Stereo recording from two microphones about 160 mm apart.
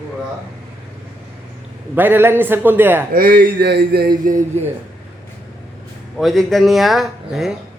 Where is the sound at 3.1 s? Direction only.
70° right (ahead or behind).